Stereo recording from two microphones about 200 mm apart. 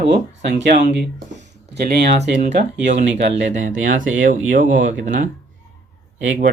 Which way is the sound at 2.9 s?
35° right (ahead or behind).